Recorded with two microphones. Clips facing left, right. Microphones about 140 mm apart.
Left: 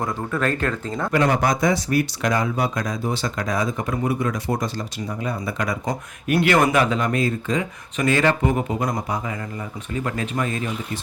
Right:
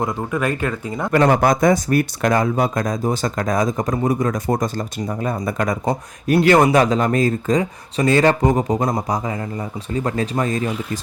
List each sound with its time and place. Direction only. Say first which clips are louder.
0.0 s speech: right 2 dB; 10° right (ahead or behind)
1.1 s speech: right 5 dB; 45° right (ahead or behind)
5.8 s speech: right 5 dB; 30° right (ahead or behind)